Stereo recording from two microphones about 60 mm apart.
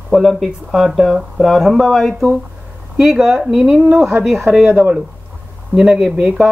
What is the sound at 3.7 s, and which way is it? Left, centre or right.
Speech, right.